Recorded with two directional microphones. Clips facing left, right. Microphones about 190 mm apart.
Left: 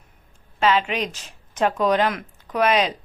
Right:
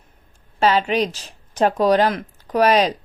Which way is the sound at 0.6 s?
35° right (ahead or behind).